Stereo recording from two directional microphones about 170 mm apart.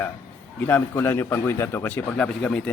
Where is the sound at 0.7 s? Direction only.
10° left (ahead or behind).